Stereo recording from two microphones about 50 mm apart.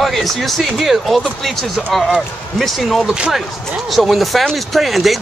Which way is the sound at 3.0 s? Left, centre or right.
Right.